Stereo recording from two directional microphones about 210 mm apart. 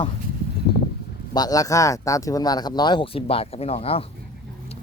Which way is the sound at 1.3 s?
20° left (ahead or behind).